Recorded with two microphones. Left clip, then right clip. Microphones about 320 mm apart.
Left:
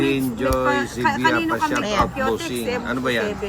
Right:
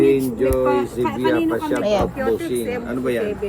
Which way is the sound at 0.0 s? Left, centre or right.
Left.